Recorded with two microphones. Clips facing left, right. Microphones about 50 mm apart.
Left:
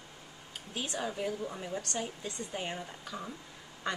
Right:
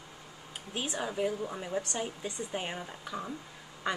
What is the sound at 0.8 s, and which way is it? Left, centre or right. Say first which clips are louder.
A woman's voice: right 3 dB; centre.